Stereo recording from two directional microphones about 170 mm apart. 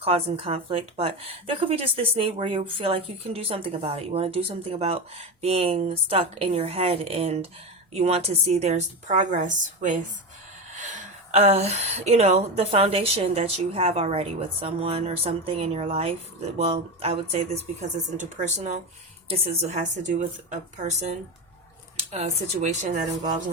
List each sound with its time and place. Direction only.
0.0 s a woman's voice: 35° right (ahead or behind)